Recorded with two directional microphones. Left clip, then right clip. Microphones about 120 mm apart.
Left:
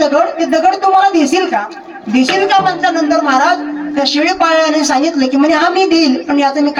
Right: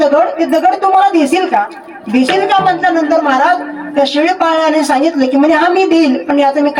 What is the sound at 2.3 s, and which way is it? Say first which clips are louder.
Speech: right 1 dB; 5° right (ahead or behind).